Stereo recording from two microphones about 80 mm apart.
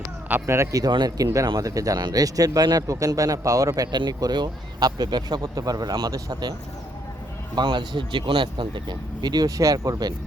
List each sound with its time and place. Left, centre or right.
0.4 s speech: right
0.8 s speech: right
1.2 s speech: right
3.9 s speech: right
7.5 s speech: right